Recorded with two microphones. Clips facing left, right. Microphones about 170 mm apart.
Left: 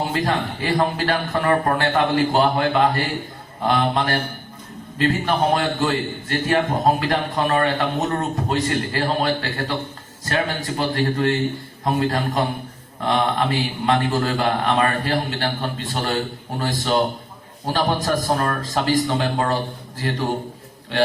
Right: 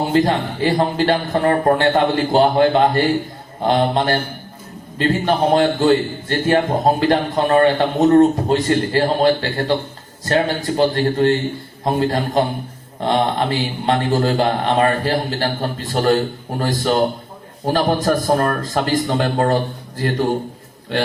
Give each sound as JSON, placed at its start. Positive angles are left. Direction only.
{"t": 0.1, "sound": "a man's voice", "side_deg": -30}